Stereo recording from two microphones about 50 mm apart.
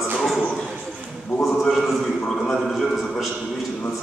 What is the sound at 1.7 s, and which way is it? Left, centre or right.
A man's voice, centre.